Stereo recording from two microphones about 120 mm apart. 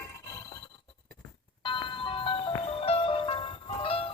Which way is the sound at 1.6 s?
45° left (ahead or behind).